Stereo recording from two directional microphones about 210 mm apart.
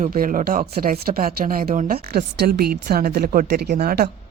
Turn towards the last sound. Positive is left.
turn(degrees=-45)  # may be behind; listen again after turning